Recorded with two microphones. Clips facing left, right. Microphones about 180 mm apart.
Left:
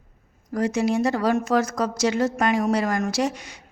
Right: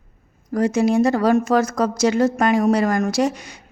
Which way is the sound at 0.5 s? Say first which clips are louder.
Right 5 dB; 45° right (ahead or behind).